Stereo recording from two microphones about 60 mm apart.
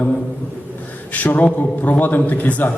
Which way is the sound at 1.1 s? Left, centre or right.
Left.